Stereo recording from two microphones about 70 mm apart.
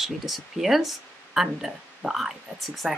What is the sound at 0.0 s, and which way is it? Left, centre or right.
Speech, centre.